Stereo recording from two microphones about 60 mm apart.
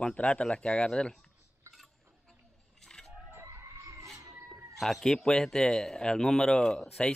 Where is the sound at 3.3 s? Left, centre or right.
Right.